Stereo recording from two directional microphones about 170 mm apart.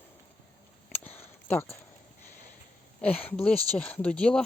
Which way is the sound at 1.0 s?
35° left (ahead or behind).